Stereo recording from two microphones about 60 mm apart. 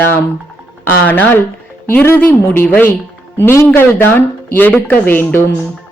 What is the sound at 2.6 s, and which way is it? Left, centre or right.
A man's voice, left.